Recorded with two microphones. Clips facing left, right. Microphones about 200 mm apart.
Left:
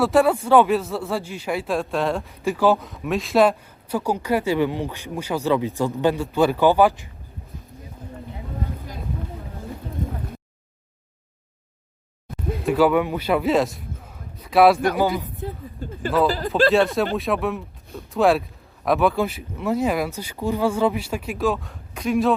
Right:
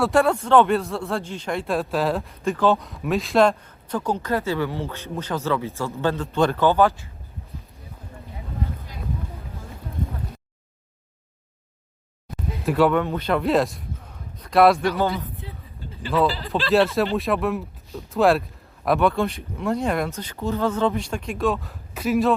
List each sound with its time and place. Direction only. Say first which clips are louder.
0.0 s speech: left 2 dB; centre (ahead or behind)
12.6 s a man's voice: left 1 dB; centre (ahead or behind)
14.9 s speech: left 2 dB; 15° left (ahead or behind)
15.4 s a sound: left 8 dB; 50° left (ahead or behind)
16.7 s speech: even; centre (ahead or behind)